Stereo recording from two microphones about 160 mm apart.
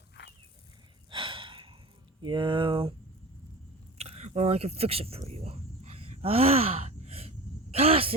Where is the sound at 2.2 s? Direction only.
30° right (ahead or behind).